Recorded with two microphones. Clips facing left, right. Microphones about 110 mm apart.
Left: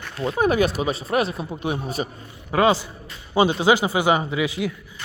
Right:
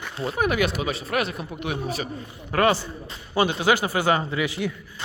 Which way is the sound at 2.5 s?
15° left (ahead or behind).